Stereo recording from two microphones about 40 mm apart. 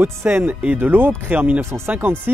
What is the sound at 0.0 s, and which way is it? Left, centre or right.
Speech, right.